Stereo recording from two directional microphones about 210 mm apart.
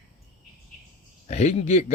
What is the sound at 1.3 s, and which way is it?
Speech, 30° left (ahead or behind).